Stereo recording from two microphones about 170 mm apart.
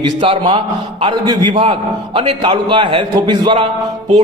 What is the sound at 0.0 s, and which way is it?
A man's voice, 30° right (ahead or behind).